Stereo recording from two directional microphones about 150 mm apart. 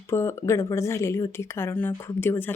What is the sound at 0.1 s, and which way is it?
Speech, 15° left (ahead or behind).